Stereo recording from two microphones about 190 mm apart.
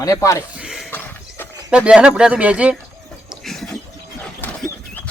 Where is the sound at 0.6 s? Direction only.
Centre (ahead or behind).